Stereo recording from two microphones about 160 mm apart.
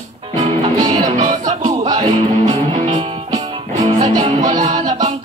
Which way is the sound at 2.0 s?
50° right (ahead or behind).